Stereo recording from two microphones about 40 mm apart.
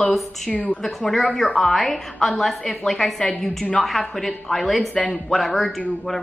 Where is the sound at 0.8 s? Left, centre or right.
Centre.